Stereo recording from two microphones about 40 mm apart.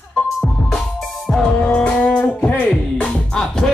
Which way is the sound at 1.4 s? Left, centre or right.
Left.